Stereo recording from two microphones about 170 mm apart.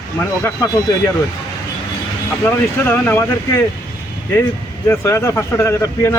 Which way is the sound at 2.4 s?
15° left (ahead or behind).